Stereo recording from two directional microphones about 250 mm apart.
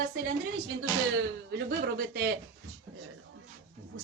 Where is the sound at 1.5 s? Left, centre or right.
Right.